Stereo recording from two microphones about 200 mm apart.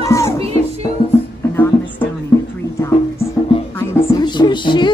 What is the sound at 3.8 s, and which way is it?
Music, 15° left (ahead or behind).